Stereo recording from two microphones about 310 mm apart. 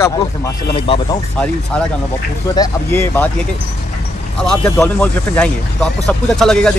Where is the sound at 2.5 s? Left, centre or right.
Centre.